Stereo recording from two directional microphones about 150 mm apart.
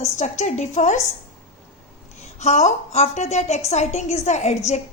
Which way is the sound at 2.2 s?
50° left (ahead or behind).